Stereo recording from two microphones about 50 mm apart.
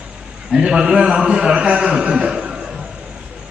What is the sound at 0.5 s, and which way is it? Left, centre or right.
A man's voice, centre.